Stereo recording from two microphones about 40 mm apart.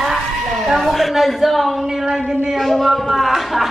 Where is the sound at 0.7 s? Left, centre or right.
Centre.